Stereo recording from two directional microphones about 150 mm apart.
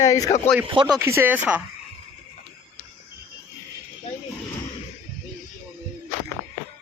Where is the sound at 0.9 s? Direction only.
15° right (ahead or behind).